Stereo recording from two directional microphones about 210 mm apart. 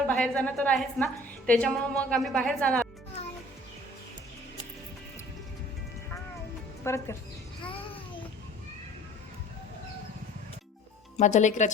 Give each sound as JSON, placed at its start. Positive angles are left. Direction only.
{"t": 0.1, "sound": "a woman's voice", "side_deg": 5}
{"t": 6.8, "sound": "speech", "side_deg": 15}
{"t": 11.2, "sound": "speech", "side_deg": 35}